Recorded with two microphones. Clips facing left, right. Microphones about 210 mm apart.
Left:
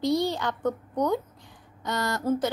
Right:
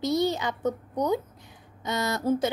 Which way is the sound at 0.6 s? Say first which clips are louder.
Left 1 dB; 20° right (ahead or behind).